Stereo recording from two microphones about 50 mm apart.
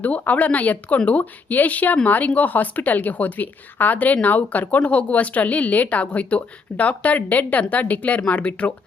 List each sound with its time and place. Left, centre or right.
0.0 s a woman's voice: left